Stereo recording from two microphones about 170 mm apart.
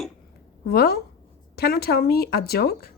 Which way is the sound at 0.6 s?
65° left (ahead or behind).